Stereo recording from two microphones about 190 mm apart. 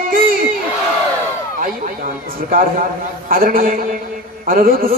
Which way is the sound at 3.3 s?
50° right (ahead or behind).